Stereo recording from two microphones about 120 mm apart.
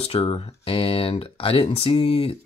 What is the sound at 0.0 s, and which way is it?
Speech, 50° left (ahead or behind).